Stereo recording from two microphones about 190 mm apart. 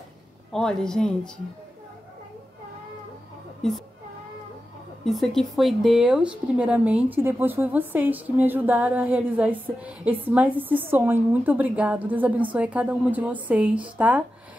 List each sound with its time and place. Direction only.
0.5 s speech: 5° left (ahead or behind)
3.6 s speech: centre (ahead or behind)
5.0 s speech: centre (ahead or behind)